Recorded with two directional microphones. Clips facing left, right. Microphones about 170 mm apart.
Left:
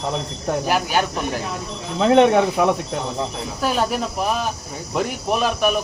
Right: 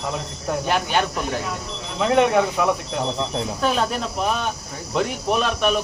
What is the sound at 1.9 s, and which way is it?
Speech, 30° left (ahead or behind).